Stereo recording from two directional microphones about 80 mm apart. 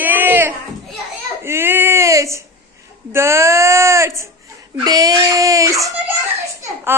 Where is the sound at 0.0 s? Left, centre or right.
Right.